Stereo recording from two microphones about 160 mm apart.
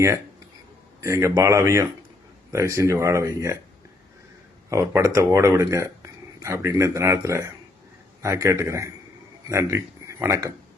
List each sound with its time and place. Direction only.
1.0 s speech: 20° right (ahead or behind)
4.7 s a man's voice: 20° right (ahead or behind)